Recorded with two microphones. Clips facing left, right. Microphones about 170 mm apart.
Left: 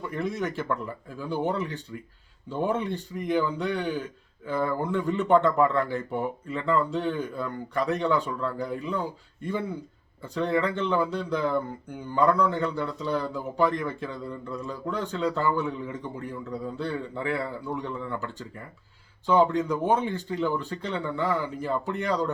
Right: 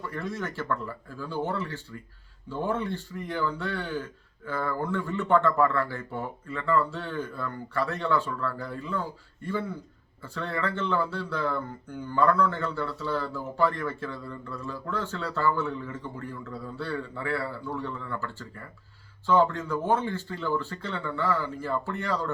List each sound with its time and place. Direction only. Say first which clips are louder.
0.0 s speech: left 4 dB; 15° left (ahead or behind)